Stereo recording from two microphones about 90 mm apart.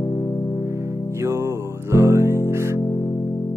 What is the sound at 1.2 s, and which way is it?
Music, 30° right (ahead or behind).